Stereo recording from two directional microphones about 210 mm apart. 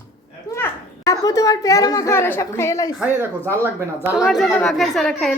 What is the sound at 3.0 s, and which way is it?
A woman's voice, 10° right (ahead or behind).